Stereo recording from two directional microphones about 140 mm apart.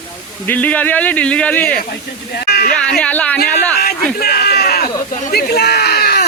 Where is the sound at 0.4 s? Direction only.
10° left (ahead or behind).